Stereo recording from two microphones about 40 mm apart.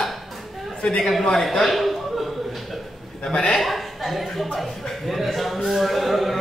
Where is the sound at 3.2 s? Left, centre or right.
Left.